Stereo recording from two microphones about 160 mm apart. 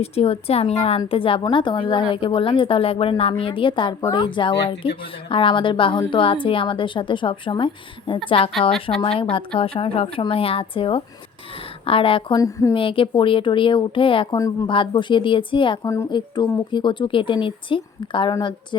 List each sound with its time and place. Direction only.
0.0 s a woman's voice: 40° left (ahead or behind)
12.4 s speech: 20° left (ahead or behind)
12.7 s a woman's voice: 35° left (ahead or behind)
14.3 s speech: 20° left (ahead or behind)
14.7 s a woman's voice: 30° left (ahead or behind)